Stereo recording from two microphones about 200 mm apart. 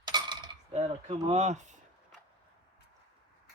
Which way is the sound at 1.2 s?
35° right (ahead or behind).